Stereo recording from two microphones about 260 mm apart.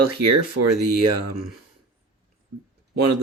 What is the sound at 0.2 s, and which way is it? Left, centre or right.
Speech, right.